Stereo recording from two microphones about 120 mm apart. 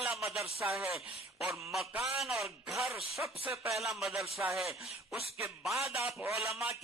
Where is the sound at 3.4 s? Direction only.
20° right (ahead or behind).